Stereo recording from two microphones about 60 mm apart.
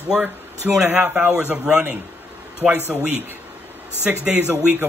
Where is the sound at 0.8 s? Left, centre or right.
Right.